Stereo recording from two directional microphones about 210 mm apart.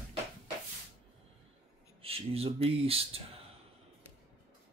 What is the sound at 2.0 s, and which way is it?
Speech, 30° right (ahead or behind).